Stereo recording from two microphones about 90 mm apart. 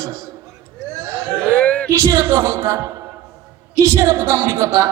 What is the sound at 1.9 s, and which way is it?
Speech, 45° right (ahead or behind).